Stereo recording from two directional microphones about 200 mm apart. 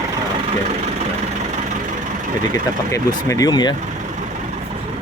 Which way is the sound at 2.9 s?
15° left (ahead or behind).